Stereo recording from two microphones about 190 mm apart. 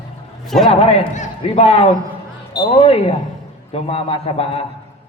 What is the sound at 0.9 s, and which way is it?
A man's voice, 30° left (ahead or behind).